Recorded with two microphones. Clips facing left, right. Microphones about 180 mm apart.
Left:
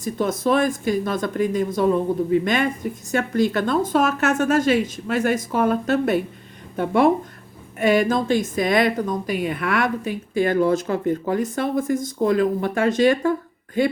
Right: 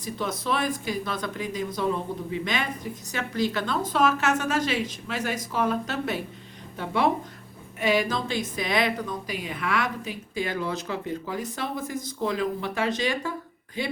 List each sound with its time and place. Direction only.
0.0 s a woman's voice: 45° left (ahead or behind)